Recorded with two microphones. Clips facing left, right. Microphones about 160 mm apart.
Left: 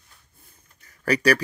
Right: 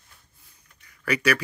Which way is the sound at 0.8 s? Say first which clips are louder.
Left 3 dB; 40° left (ahead or behind).